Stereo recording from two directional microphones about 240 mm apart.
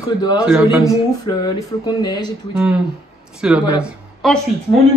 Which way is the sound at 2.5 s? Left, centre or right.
Centre.